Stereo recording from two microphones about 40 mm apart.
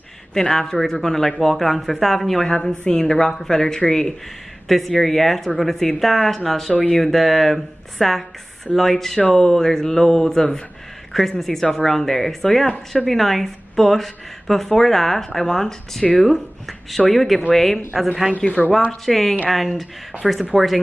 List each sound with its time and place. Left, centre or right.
0.3 s speech: centre
2.4 s speech: centre
18.9 s speech: centre